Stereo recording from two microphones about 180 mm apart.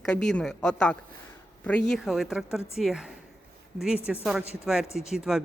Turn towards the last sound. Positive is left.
turn(degrees=-5)  # may be behind; listen again after turning